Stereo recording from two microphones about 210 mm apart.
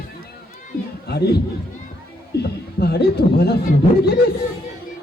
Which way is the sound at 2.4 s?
50° left (ahead or behind).